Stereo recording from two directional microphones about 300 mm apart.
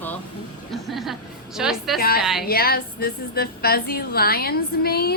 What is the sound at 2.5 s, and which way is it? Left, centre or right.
Speech, left.